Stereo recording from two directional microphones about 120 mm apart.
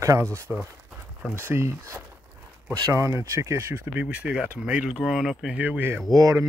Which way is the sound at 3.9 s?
10° right (ahead or behind).